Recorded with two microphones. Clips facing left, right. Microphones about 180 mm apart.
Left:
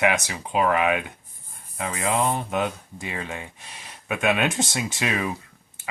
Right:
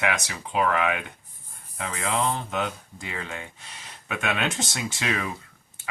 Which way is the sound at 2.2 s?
15° left (ahead or behind).